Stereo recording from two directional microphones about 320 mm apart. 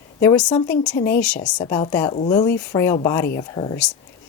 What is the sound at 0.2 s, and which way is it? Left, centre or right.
Speech, centre.